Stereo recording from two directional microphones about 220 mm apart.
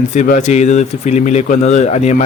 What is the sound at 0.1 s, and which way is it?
A man's voice, 35° left (ahead or behind).